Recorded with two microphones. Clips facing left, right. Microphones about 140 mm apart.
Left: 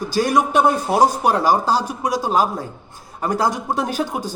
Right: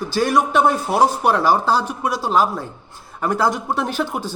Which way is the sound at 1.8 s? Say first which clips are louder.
Even; 10° left (ahead or behind).